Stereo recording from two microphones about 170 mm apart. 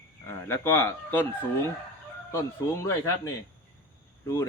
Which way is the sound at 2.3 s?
15° left (ahead or behind).